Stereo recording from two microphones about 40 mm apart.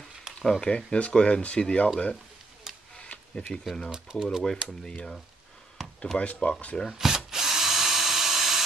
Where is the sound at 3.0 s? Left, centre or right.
Left.